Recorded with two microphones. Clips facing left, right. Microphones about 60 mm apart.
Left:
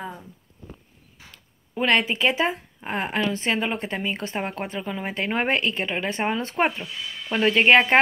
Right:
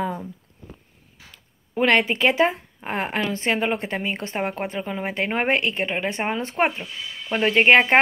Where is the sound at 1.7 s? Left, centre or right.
Right.